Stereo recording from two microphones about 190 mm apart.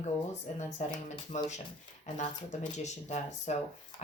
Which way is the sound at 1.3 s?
40° left (ahead or behind).